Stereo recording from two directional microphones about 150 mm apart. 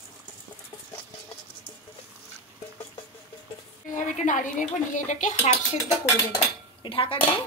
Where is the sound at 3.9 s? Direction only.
60° left (ahead or behind).